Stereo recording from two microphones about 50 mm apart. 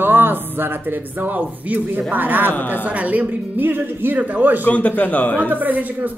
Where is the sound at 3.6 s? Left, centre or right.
Right.